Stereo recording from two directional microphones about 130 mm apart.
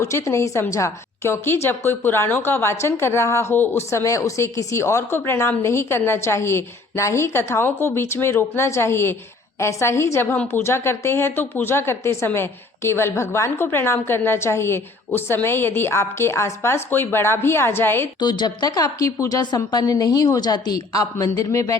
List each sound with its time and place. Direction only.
0.0 s a woman's voice: 20° left (ahead or behind)
18.2 s a woman's voice: 35° left (ahead or behind)